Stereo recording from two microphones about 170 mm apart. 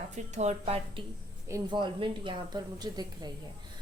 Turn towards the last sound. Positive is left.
turn(degrees=-25)  # may be behind; listen again after turning